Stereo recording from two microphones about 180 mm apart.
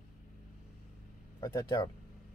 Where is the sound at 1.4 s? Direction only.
20° left (ahead or behind).